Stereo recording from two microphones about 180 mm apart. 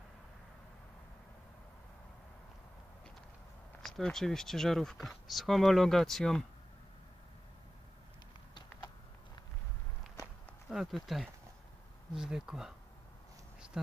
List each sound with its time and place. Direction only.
3.8 s speech: centre (ahead or behind)
8.5 s a sound: 25° left (ahead or behind)
10.7 s speech: centre (ahead or behind)